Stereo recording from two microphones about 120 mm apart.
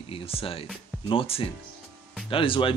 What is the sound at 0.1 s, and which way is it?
Speech, 50° left (ahead or behind).